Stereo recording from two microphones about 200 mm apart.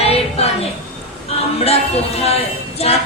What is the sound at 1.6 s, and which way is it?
Speech, 30° left (ahead or behind).